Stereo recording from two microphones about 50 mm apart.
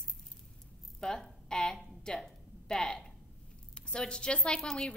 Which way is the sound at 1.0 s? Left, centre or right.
Centre.